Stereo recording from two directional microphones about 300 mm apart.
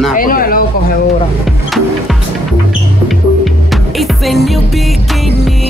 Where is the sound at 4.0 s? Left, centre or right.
Centre.